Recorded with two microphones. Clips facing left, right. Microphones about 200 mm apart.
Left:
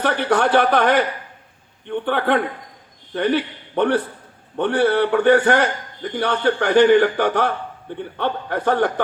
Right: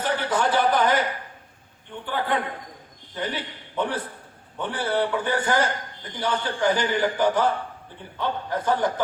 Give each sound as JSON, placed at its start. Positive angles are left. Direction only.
{"t": 0.0, "sound": "a man's voice", "side_deg": 65}